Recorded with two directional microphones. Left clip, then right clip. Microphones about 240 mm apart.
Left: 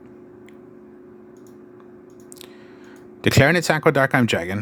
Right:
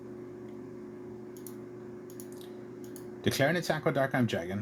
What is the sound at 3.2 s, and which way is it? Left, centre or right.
Speech, left.